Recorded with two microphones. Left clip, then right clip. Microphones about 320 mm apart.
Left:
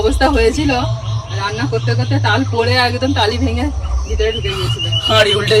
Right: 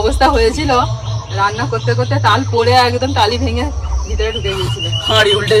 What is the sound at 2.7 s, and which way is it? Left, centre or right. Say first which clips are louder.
Speech: right 4 dB; centre.